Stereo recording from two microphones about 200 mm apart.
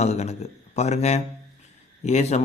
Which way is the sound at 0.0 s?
35° left (ahead or behind).